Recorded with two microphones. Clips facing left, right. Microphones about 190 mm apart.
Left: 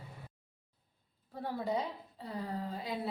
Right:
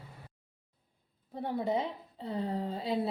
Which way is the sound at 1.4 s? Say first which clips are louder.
Right 3 dB; 20° right (ahead or behind).